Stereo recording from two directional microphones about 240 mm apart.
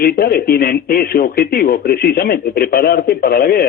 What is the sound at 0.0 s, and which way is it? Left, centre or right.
A man's voice, left.